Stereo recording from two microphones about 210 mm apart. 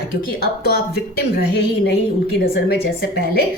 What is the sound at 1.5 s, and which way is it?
Speech, 50° left (ahead or behind).